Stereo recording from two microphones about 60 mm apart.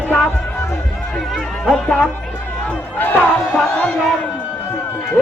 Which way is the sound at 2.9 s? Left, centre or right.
Left.